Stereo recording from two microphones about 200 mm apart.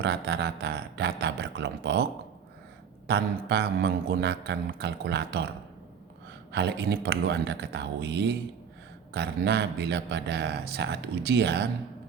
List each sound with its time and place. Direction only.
0.0 s speech: 55° right (ahead or behind)
3.1 s speech: 55° right (ahead or behind)
6.5 s speech: 55° right (ahead or behind)